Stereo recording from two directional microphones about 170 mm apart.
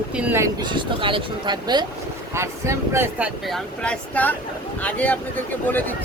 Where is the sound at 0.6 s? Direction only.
25° right (ahead or behind).